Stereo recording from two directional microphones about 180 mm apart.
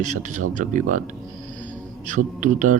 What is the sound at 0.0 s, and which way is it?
Speech, 45° right (ahead or behind).